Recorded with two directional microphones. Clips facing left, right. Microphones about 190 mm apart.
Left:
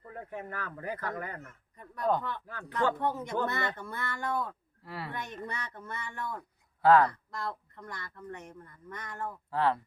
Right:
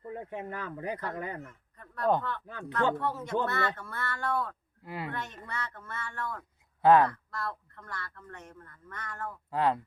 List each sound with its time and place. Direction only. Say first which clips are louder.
0.0 s speech: right 3 dB; 20° right (ahead or behind)
1.7 s speech: right 1 dB; 15° left (ahead or behind)
2.5 s speech: right 4 dB; 20° right (ahead or behind)
3.0 s speech: even; 15° left (ahead or behind)
4.8 s speech: right 3 dB; 15° right (ahead or behind)
5.1 s speech: even; 15° left (ahead or behind)
6.8 s speech: right 1 dB; 20° right (ahead or behind)
7.1 s speech: even; 15° left (ahead or behind)
9.5 s speech: right 1 dB; 20° right (ahead or behind)